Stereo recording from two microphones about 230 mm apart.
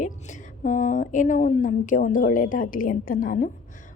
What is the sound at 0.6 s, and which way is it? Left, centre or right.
A woman's voice, left.